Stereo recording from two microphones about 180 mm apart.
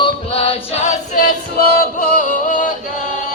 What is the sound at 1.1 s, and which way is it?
Singing, 55° left (ahead or behind).